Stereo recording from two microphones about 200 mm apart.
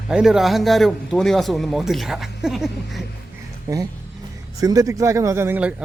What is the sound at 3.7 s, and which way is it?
Speech, 15° right (ahead or behind).